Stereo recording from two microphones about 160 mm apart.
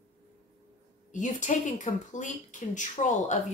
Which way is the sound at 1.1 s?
50° left (ahead or behind).